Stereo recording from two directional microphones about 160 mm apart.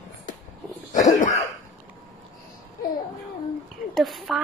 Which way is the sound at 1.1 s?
50° left (ahead or behind).